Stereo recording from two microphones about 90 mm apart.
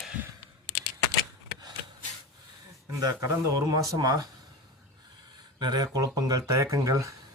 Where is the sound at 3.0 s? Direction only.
40° right (ahead or behind).